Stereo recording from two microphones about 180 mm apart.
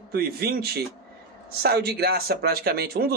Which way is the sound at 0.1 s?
60° right (ahead or behind).